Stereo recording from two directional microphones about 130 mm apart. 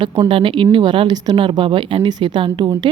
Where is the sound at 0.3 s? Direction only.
40° right (ahead or behind).